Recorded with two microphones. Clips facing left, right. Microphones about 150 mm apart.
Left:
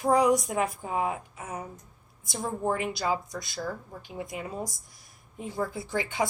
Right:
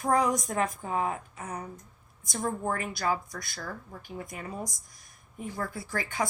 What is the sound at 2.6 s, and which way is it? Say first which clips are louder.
A woman's voice: left 2 dB; 15° left (ahead or behind).